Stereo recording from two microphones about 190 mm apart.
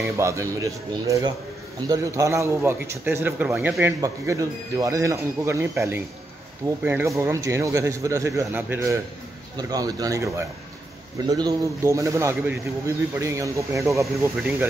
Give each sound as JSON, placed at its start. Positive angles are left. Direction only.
{"t": 0.2, "sound": "a man's voice", "side_deg": -15}